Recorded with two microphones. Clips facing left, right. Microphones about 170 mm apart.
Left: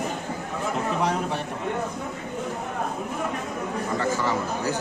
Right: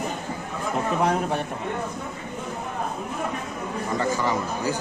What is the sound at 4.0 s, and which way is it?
Speech, 15° right (ahead or behind).